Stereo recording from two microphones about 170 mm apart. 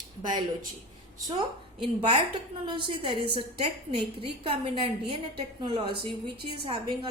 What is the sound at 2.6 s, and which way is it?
A woman's voice, 30° right (ahead or behind).